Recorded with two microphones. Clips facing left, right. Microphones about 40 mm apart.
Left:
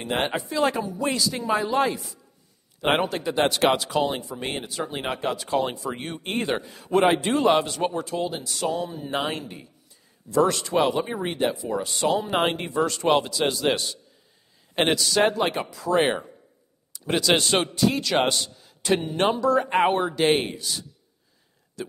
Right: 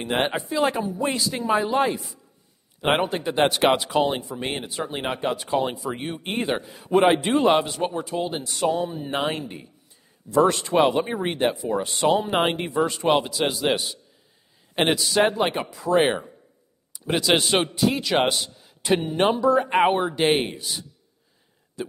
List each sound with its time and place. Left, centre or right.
0.1 s speech: centre
3.1 s speech: right
4.8 s speech: centre
8.3 s speech: right
8.5 s speech: right
12.3 s speech: centre
21.8 s a sound: centre